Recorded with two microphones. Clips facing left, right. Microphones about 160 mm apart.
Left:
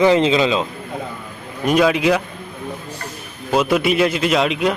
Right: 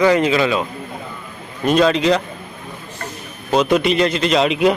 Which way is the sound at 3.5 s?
5° left (ahead or behind).